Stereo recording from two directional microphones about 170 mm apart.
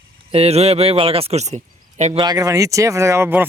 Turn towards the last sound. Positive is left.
turn(degrees=-15)  # may be behind; listen again after turning